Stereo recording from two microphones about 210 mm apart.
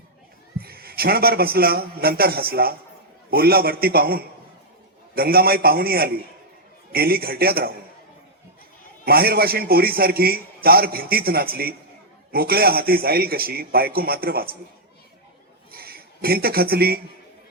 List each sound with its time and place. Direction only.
0.6 s a man's voice: 45° right (ahead or behind)
9.0 s a man's voice: 45° right (ahead or behind)
15.7 s a sound: 45° right (ahead or behind)